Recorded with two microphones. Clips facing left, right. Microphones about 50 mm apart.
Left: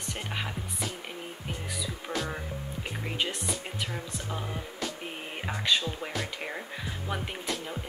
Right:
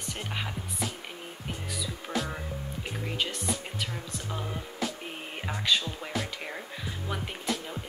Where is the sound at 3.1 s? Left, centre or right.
Centre.